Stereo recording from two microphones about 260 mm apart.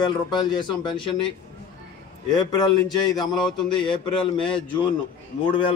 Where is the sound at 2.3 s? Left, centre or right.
Centre.